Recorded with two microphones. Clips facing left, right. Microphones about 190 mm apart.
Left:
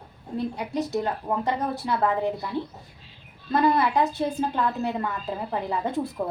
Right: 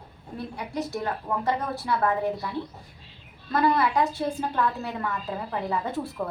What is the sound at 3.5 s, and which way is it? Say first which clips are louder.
A woman's voice: left 1 dB; 20° left (ahead or behind).